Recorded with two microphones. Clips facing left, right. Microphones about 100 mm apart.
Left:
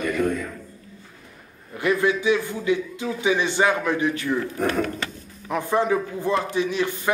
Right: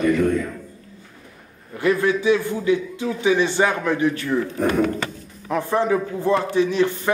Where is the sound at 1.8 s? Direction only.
15° left (ahead or behind).